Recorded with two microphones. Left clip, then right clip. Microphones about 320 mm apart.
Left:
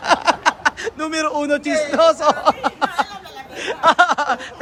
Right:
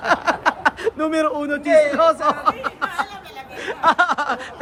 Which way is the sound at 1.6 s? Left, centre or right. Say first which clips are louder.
Right 6 dB; right.